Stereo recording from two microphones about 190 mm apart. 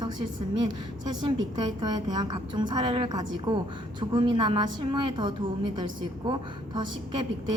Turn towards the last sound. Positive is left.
turn(degrees=-25)  # may be behind; listen again after turning